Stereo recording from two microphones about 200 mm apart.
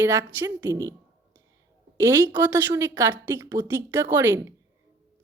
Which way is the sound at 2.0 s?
15° right (ahead or behind).